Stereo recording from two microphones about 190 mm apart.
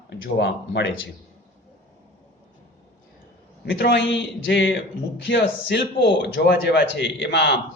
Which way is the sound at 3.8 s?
65° left (ahead or behind).